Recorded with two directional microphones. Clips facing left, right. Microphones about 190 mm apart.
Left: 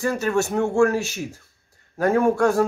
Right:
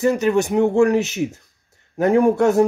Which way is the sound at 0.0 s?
20° right (ahead or behind).